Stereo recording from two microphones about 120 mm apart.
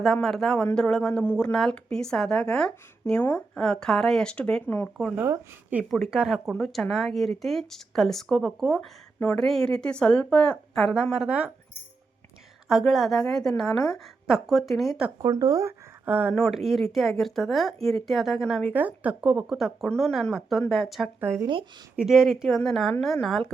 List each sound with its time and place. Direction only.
0.0 s speech: 5° left (ahead or behind)
12.6 s speech: centre (ahead or behind)
15.2 s speech: 30° right (ahead or behind)
16.0 s speech: 15° right (ahead or behind)
16.3 s speech: centre (ahead or behind)
18.7 s speech: 15° right (ahead or behind)
21.2 s speech: 20° right (ahead or behind)
21.9 s speech: 5° right (ahead or behind)